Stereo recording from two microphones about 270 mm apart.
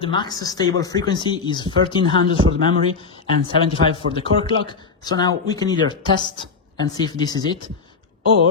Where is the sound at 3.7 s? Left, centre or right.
Centre.